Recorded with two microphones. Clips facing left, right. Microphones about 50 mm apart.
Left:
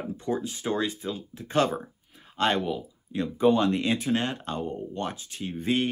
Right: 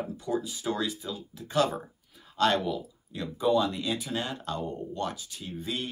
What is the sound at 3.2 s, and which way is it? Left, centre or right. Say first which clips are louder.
A man's voice: left 3 dB; left.